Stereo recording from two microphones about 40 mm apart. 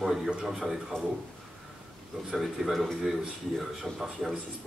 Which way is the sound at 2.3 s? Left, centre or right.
Centre.